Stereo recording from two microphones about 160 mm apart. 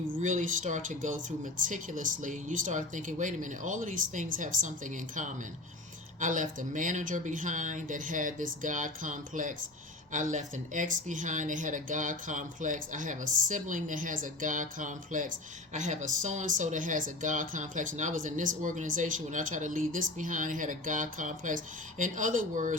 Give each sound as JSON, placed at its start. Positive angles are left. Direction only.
{"t": 0.1, "sound": "speech", "side_deg": -50}